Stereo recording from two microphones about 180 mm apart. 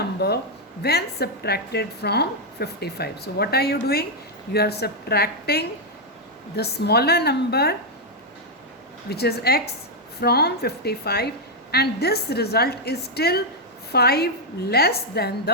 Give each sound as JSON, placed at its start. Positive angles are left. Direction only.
{"t": 0.2, "sound": "a woman's voice", "side_deg": 65}
{"t": 9.0, "sound": "a woman's voice", "side_deg": 65}